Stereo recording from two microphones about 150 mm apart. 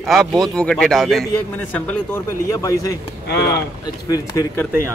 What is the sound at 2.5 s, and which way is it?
Speech, 20° left (ahead or behind).